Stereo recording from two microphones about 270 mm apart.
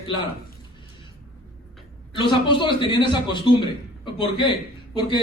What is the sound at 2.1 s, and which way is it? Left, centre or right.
A man's voice, centre.